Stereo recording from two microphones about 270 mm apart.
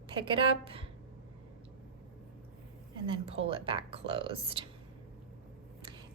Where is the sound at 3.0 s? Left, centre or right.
Centre.